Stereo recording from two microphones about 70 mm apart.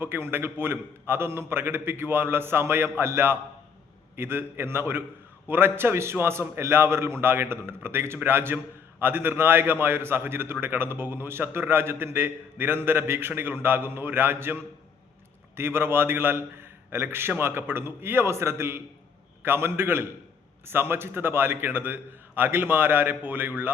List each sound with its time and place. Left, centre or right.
0.0 s a man's voice: right